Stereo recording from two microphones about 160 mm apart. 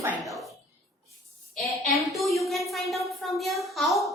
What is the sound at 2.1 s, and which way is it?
A woman's voice, centre (ahead or behind).